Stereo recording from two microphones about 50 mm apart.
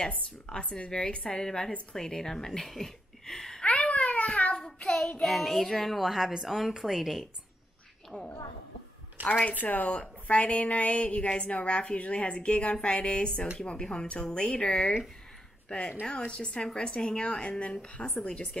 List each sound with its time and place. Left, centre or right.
0.5 s a woman's voice: centre
3.6 s a sound: left
4.8 s child singing: centre
5.2 s a woman's voice: centre
8.1 s a woman's voice: left
9.4 s a woman's voice: left